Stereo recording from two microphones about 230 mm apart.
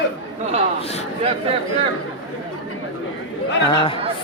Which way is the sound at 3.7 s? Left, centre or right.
Left.